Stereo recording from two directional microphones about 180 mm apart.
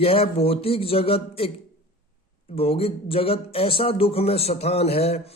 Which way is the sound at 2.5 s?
30° left (ahead or behind).